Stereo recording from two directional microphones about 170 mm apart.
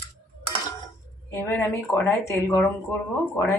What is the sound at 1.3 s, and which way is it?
Speech, 15° left (ahead or behind).